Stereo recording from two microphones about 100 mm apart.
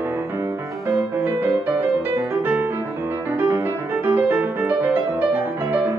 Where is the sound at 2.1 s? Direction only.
20° right (ahead or behind).